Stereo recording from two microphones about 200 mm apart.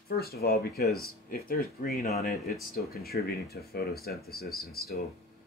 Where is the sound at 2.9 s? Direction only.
50° left (ahead or behind).